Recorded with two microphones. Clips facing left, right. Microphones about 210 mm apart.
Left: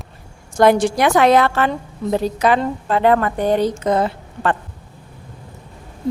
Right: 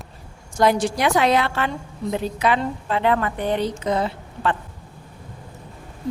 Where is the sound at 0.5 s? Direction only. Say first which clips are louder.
Left 5 dB; 55° left (ahead or behind).